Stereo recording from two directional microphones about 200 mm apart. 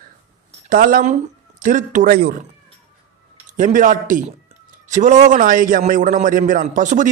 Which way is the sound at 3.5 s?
40° right (ahead or behind).